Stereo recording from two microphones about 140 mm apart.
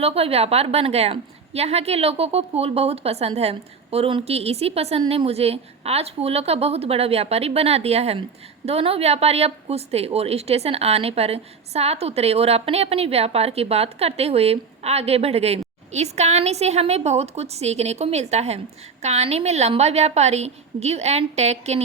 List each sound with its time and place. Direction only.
0.0 s a woman's voice: 45° right (ahead or behind)